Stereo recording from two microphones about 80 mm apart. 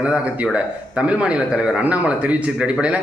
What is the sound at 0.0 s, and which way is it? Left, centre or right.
Speech, centre.